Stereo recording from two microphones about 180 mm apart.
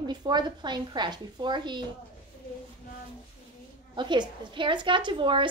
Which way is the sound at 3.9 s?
25° right (ahead or behind).